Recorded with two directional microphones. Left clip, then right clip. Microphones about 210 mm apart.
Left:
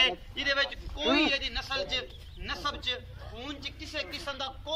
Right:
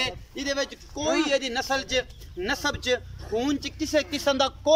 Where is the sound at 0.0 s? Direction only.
25° right (ahead or behind).